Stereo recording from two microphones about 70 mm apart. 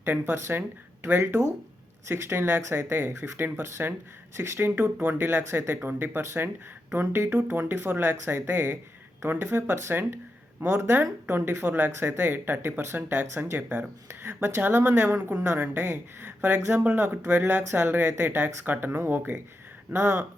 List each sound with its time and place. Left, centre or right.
0.0 s speech: right